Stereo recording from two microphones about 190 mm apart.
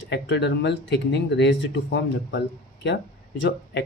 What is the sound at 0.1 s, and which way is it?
Speech, 65° left (ahead or behind).